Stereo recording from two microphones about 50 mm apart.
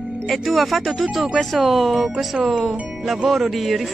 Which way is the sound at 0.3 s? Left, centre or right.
Centre.